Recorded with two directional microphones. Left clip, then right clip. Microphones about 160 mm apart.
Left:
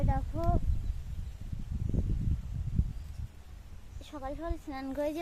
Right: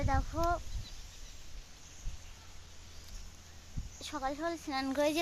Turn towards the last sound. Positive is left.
turn(degrees=-20)  # may be behind; listen again after turning